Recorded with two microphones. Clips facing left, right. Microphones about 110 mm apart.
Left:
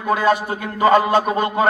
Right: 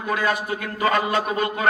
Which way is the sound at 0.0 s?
30° left (ahead or behind).